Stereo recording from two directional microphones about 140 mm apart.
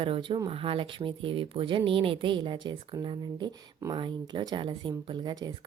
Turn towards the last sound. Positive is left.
turn(degrees=-30)  # may be behind; listen again after turning